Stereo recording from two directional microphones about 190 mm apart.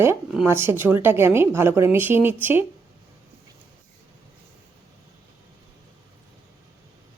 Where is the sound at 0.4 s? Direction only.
15° right (ahead or behind).